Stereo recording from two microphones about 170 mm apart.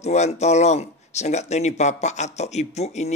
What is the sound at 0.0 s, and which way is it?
Speech, 40° left (ahead or behind).